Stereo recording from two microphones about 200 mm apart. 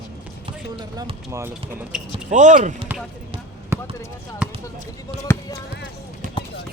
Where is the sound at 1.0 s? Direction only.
15° right (ahead or behind).